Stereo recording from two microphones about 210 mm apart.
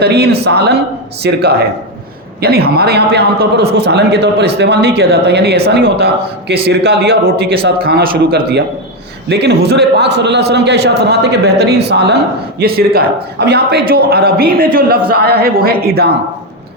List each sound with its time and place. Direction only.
0.0 s a man's voice: 50° right (ahead or behind)